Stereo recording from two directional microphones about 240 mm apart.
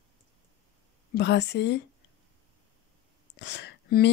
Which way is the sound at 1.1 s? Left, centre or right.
Left.